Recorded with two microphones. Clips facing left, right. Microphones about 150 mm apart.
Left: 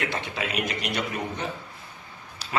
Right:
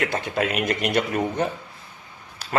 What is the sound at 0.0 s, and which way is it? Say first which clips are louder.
A man's voice: right 6 dB; 45° right (ahead or behind).